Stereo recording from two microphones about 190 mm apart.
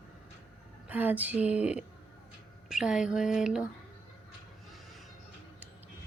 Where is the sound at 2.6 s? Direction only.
5° right (ahead or behind).